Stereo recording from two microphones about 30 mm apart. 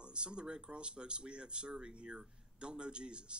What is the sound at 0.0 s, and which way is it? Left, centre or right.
A man's voice, right.